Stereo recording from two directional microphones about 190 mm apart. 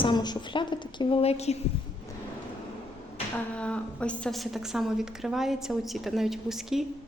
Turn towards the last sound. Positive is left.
turn(degrees=0)  # may be behind; listen again after turning